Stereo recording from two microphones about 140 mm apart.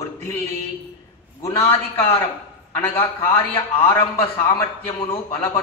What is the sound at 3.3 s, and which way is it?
Speech, 40° left (ahead or behind).